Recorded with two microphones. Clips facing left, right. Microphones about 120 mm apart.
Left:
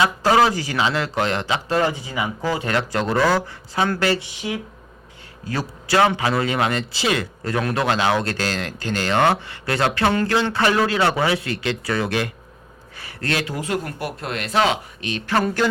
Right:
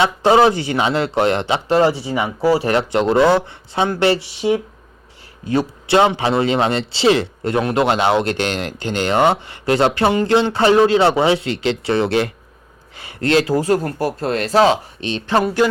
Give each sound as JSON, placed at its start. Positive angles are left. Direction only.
{"t": 0.0, "sound": "a man's voice", "side_deg": -25}
{"t": 4.2, "sound": "speech", "side_deg": 15}
{"t": 5.5, "sound": "a man's voice", "side_deg": -25}
{"t": 10.1, "sound": "a sound", "side_deg": -15}
{"t": 10.5, "sound": "a man's voice", "side_deg": -25}
{"t": 15.4, "sound": "a sound", "side_deg": -10}